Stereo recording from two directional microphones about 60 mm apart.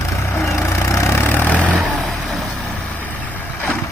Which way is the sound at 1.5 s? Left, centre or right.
Left.